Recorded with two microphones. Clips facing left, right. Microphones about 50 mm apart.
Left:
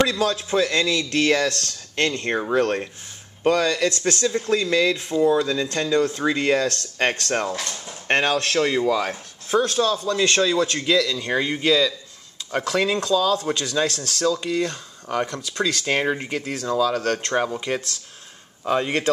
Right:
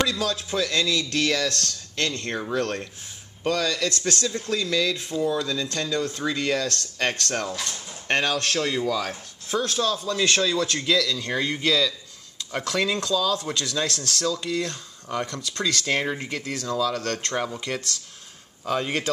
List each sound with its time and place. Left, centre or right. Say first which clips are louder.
0.0 s speech: left 4 dB; left
13.1 s a man's voice: left 4 dB; left